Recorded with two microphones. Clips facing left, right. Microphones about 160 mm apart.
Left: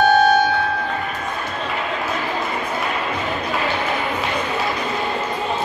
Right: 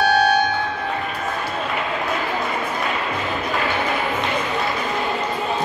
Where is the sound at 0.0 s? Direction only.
45° left (ahead or behind).